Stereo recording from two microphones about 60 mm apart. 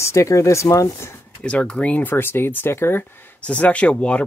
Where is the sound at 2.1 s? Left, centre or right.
Left.